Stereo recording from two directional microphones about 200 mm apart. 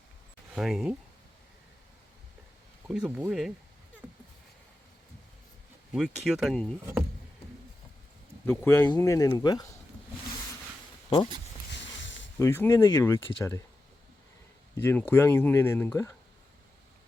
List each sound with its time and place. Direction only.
0.5 s speech: centre (ahead or behind)
2.8 s speech: 5° right (ahead or behind)
5.9 s speech: centre (ahead or behind)
8.4 s speech: 10° left (ahead or behind)
11.7 s a sound: 60° left (ahead or behind)
12.4 s speech: 15° left (ahead or behind)
14.8 s speech: 10° left (ahead or behind)